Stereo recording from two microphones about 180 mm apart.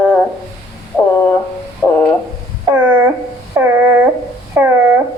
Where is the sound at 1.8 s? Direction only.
10° left (ahead or behind).